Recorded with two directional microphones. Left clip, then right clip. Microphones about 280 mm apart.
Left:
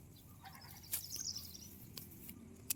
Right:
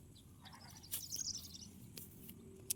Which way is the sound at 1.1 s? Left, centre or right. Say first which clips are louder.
Right 1 dB; right.